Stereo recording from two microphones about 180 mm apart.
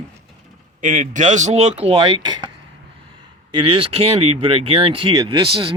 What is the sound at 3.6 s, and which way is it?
A man's voice, 30° right (ahead or behind).